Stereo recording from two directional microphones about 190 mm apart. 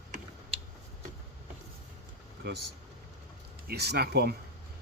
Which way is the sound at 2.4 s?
60° right (ahead or behind).